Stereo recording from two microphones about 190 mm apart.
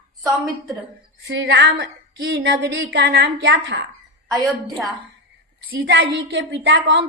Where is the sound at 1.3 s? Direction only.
60° right (ahead or behind).